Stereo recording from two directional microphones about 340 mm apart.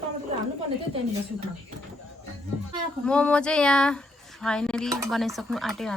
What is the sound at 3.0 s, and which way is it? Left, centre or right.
A woman's voice, centre.